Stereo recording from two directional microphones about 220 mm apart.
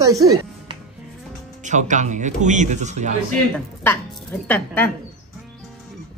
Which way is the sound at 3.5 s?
10° left (ahead or behind).